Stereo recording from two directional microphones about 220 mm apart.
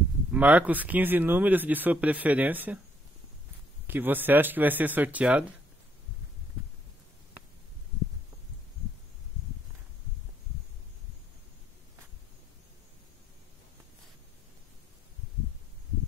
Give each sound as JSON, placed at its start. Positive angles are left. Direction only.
{"t": 0.3, "sound": "speech", "side_deg": -5}
{"t": 3.8, "sound": "speech", "side_deg": -10}